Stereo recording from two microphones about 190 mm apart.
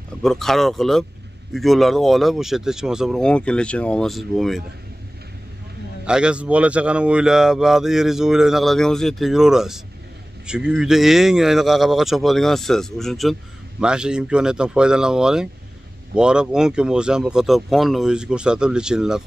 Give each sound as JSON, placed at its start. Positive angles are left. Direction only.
{"t": 0.2, "sound": "speech", "side_deg": 0}
{"t": 6.0, "sound": "speech", "side_deg": -5}